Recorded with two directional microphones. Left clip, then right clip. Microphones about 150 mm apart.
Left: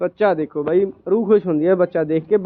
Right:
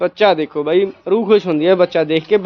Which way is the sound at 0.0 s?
25° right (ahead or behind).